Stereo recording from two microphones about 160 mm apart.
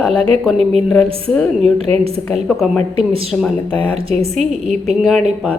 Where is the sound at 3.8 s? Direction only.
35° right (ahead or behind).